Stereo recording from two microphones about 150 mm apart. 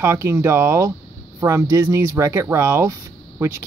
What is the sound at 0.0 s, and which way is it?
Speech, 20° right (ahead or behind).